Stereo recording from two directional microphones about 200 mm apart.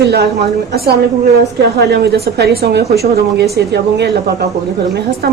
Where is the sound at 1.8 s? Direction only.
55° right (ahead or behind).